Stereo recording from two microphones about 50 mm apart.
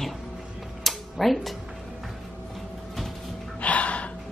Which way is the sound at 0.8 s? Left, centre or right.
Centre.